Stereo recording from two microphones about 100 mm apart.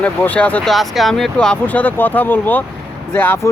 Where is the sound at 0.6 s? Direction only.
Centre (ahead or behind).